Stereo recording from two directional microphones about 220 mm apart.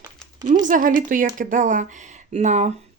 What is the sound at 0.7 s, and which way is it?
Speech, 40° right (ahead or behind).